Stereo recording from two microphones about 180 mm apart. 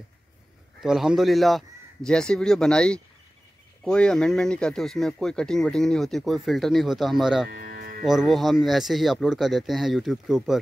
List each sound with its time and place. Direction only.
0.7 s speech: centre (ahead or behind)
7.6 s music: 55° right (ahead or behind)
8.0 s speech: centre (ahead or behind)